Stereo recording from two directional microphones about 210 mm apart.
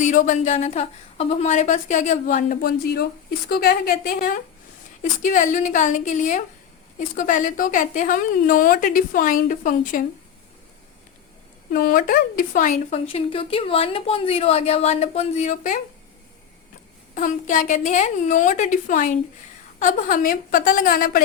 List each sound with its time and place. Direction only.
0.0 s a woman's voice: 35° left (ahead or behind)
11.7 s a woman's voice: 45° left (ahead or behind)
13.1 s a woman's voice: 25° left (ahead or behind)
17.2 s a woman's voice: 40° left (ahead or behind)